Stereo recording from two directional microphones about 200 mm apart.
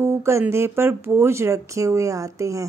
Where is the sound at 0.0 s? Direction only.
15° right (ahead or behind).